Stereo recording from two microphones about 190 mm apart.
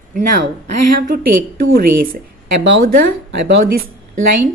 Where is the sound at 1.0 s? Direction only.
50° right (ahead or behind).